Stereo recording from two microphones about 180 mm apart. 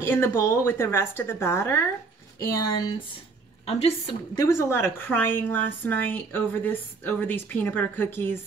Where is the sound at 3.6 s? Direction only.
35° left (ahead or behind).